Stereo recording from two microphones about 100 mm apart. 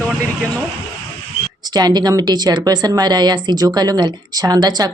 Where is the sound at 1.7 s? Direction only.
45° right (ahead or behind).